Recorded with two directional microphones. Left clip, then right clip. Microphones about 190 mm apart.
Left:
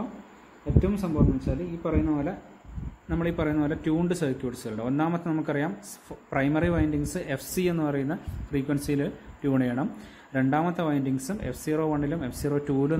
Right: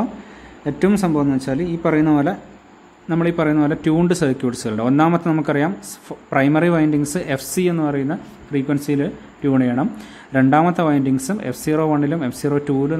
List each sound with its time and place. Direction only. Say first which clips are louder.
0.7 s a man's voice: right 9 dB; 35° right (ahead or behind)
3.1 s a man's voice: right 10 dB; 15° right (ahead or behind)